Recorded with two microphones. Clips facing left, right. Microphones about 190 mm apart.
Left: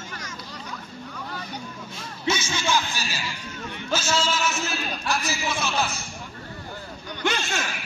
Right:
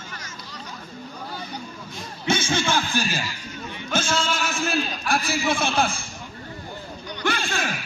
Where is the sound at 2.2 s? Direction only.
55° right (ahead or behind).